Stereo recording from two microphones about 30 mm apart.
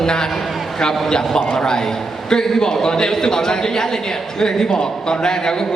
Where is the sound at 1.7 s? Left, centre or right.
Left.